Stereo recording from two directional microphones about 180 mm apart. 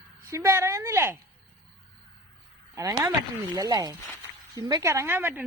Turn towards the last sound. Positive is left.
turn(degrees=-10)  # may be behind; listen again after turning